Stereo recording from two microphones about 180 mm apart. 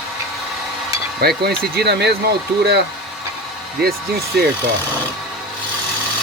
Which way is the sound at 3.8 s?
60° right (ahead or behind).